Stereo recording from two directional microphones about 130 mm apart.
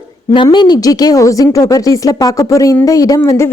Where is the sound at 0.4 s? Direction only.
35° left (ahead or behind).